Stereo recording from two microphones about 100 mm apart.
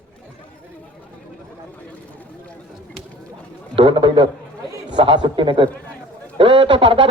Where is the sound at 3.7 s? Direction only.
55° right (ahead or behind).